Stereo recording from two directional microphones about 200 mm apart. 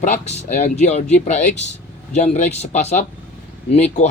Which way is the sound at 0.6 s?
35° left (ahead or behind).